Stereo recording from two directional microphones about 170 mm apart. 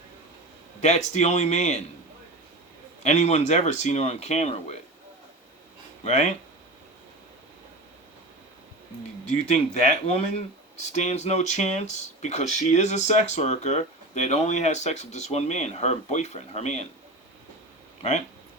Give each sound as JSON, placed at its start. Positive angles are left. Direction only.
{"t": 0.8, "sound": "speech", "side_deg": 40}
{"t": 3.0, "sound": "speech", "side_deg": 40}
{"t": 6.1, "sound": "speech", "side_deg": 40}
{"t": 9.5, "sound": "speech", "side_deg": 35}